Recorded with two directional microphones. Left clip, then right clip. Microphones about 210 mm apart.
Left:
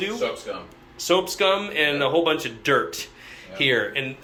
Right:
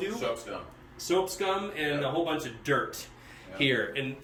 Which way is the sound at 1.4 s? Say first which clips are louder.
Left 10 dB; centre (ahead or behind).